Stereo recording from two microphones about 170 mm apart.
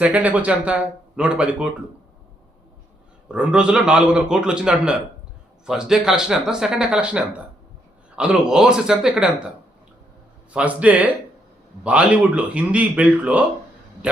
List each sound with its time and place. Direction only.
0.0 s speech: 10° right (ahead or behind)
3.2 s speech: 5° right (ahead or behind)
10.5 s speech: 5° right (ahead or behind)
14.0 s a sound: 5° right (ahead or behind)